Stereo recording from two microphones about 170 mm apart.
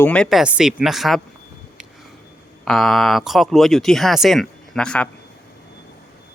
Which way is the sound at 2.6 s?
Centre (ahead or behind).